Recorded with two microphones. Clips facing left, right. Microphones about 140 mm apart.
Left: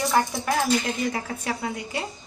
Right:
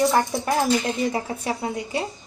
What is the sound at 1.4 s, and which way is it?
Speech, 25° right (ahead or behind).